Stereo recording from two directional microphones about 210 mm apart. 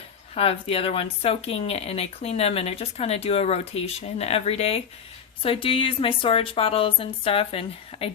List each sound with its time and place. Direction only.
0.3 s speech: 25° left (ahead or behind)